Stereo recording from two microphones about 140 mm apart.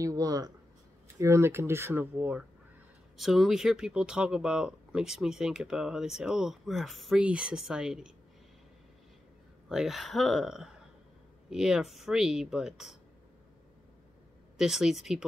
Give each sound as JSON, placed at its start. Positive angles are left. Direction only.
{"t": 0.0, "sound": "speech", "side_deg": -25}
{"t": 9.7, "sound": "speech", "side_deg": 0}
{"t": 14.6, "sound": "speech", "side_deg": -5}